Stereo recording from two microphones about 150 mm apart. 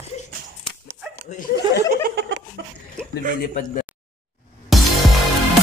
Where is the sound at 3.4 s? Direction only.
70° left (ahead or behind).